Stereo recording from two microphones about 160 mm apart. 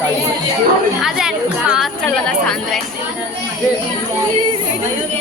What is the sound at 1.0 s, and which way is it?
A woman's voice, 5° right (ahead or behind).